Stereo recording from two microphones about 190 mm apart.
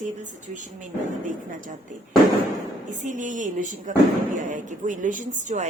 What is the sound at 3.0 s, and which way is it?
A woman's voice, 40° right (ahead or behind).